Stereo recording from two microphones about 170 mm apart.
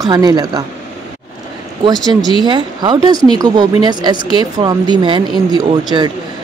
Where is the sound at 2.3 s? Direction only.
25° right (ahead or behind).